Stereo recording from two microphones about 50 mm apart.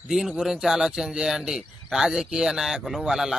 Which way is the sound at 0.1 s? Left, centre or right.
Centre.